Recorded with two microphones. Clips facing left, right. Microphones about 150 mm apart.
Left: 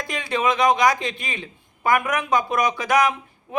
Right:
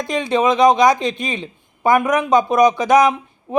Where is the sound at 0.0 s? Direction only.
20° right (ahead or behind).